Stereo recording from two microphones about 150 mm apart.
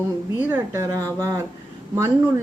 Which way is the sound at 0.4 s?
15° right (ahead or behind).